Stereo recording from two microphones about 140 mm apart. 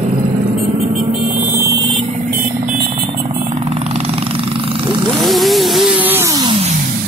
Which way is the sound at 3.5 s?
45° right (ahead or behind).